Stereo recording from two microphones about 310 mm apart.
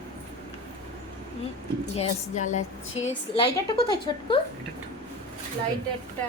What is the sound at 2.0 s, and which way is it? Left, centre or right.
A woman's voice, left.